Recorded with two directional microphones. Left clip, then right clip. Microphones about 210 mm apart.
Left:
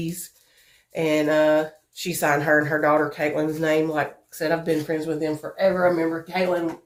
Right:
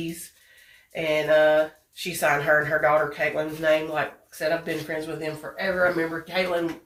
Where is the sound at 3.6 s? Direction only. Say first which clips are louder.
Right 1 dB; 55° left (ahead or behind).